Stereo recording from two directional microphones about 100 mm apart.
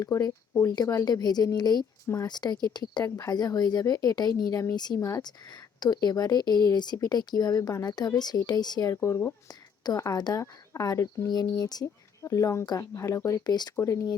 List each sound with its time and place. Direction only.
0.0 s a woman's voice: 35° left (ahead or behind)
8.9 s speech: 25° left (ahead or behind)
9.8 s a woman's voice: 35° left (ahead or behind)
11.3 s a woman's voice: 45° left (ahead or behind)
13.7 s a woman's voice: 30° left (ahead or behind)